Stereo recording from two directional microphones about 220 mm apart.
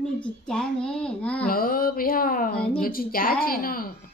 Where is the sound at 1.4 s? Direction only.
40° left (ahead or behind).